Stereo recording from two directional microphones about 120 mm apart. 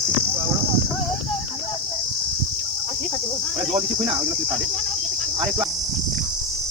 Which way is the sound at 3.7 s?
5° right (ahead or behind).